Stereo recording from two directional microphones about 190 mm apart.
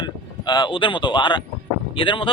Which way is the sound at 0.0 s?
25° left (ahead or behind).